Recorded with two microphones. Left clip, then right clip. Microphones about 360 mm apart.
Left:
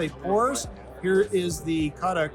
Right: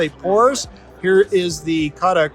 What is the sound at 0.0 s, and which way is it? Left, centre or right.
Speech, right.